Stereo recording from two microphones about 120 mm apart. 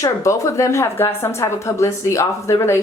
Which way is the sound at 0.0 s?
25° left (ahead or behind).